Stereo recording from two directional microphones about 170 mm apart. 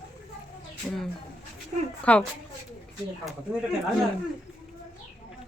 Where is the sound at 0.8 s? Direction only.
Centre (ahead or behind).